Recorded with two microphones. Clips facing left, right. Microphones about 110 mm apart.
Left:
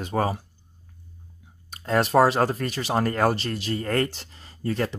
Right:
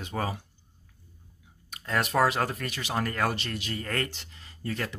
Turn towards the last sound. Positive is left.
turn(degrees=35)  # may be behind; listen again after turning